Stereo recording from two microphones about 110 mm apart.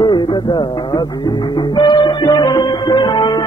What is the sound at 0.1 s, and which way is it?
Music, 40° left (ahead or behind).